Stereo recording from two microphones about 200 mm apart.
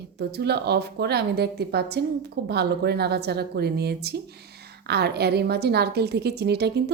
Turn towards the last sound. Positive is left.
turn(degrees=-55)  # may be behind; listen again after turning